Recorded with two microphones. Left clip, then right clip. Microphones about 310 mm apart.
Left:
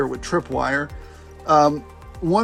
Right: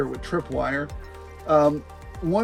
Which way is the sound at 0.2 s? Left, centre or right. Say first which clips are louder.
Left 4 dB; left.